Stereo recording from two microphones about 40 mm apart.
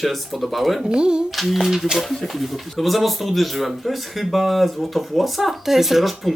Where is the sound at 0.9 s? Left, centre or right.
Right.